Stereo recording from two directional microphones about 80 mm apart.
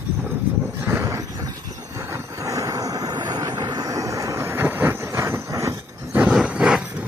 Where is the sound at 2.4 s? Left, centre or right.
Right.